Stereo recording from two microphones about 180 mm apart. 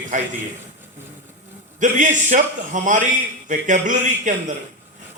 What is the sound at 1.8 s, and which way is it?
A man's voice, 45° right (ahead or behind).